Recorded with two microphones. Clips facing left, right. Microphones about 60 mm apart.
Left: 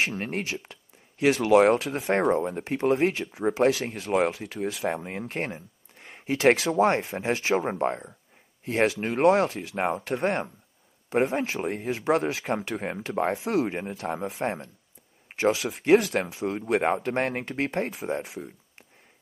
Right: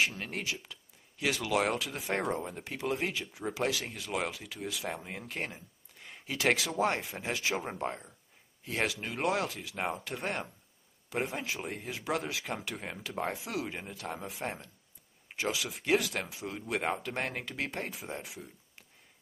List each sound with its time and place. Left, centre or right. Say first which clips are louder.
0.0 s speech: left 4 dB; left